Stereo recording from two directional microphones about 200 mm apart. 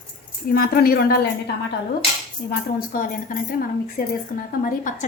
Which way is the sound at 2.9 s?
45° left (ahead or behind).